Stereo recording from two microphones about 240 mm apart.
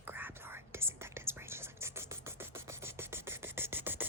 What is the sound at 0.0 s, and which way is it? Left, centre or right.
Whispering, centre.